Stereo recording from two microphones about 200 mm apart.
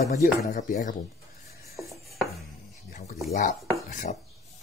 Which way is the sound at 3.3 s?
40° left (ahead or behind).